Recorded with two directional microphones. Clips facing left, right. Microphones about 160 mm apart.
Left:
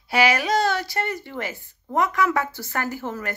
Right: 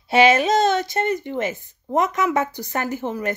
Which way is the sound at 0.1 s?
25° right (ahead or behind).